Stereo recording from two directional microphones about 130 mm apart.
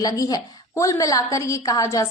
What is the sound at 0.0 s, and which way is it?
A woman's voice, 30° left (ahead or behind).